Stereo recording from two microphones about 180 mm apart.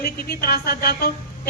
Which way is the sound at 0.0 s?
60° left (ahead or behind).